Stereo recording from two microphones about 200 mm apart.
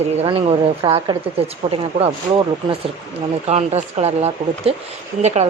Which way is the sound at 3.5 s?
35° right (ahead or behind).